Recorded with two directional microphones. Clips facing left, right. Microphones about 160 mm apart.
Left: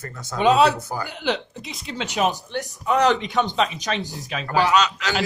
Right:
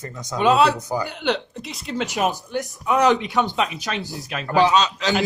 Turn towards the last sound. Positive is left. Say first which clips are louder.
# right 1 dB
turn(degrees=-20)  # may be behind; listen again after turning